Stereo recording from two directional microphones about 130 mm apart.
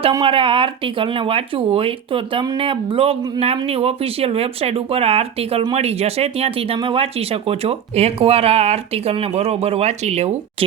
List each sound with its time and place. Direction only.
0.1 s speech: 40° right (ahead or behind); by 10.3 s 55° right (ahead or behind)